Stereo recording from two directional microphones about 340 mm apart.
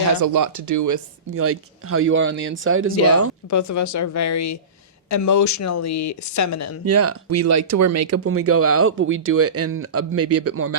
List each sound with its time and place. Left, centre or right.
0.1 s speech: right
1.4 s speech: right
3.5 s speech: left
6.8 s speech: right